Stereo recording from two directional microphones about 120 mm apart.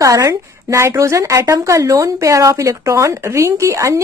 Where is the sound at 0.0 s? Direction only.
30° right (ahead or behind).